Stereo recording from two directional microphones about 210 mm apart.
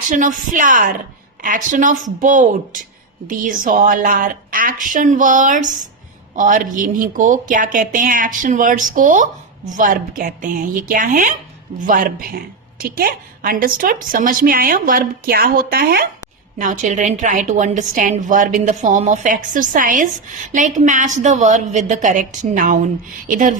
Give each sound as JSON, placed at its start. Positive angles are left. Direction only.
{"t": 0.1, "sound": "a woman's voice", "side_deg": -40}